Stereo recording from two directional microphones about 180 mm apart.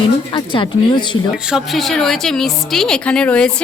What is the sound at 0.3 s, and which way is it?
Speech, 25° left (ahead or behind).